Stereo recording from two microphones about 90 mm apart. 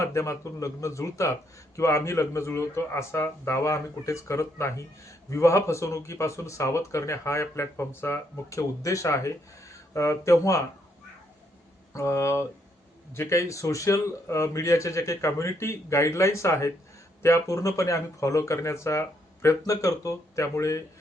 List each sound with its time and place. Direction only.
0.0 s a man's voice: 30° left (ahead or behind)
11.9 s a man's voice: 35° left (ahead or behind)